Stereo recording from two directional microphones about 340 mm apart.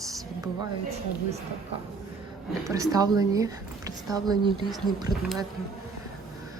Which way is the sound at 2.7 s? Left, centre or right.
Centre.